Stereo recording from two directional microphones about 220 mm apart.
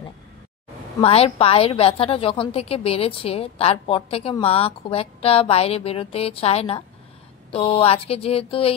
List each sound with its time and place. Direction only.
1.0 s a woman's voice: 25° left (ahead or behind)